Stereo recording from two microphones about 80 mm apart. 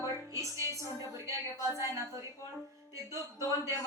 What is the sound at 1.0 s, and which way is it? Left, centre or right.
Speech, right.